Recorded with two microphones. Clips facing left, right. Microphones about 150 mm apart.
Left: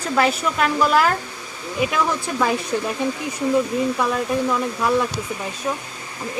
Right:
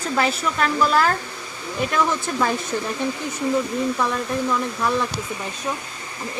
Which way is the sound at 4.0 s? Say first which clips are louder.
Left 2 dB; 5° left (ahead or behind).